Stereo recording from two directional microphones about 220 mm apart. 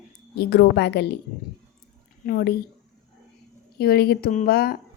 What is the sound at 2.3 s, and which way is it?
Speech, 40° left (ahead or behind).